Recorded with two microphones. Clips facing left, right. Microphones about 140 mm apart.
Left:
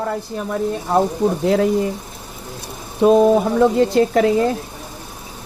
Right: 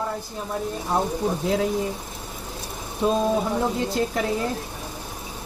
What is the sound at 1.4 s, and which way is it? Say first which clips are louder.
Speech: left 7 dB; 70° left (ahead or behind).